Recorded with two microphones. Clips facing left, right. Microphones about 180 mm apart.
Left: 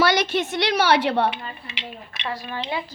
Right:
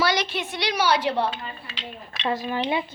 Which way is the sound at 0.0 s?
50° left (ahead or behind).